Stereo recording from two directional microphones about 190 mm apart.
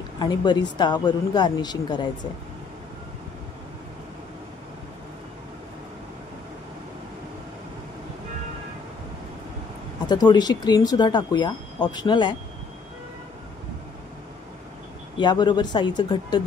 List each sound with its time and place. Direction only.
0.2 s speech: 20° left (ahead or behind)
10.0 s speech: 20° left (ahead or behind)
15.1 s speech: 25° left (ahead or behind)